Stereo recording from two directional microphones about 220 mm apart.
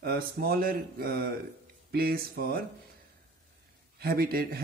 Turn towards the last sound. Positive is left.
turn(degrees=-45)  # may be behind; listen again after turning